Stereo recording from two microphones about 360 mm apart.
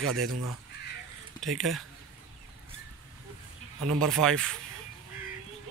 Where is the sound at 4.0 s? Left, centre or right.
Centre.